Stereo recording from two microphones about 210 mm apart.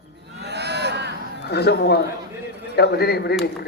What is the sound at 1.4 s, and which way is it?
A man's voice, 50° left (ahead or behind).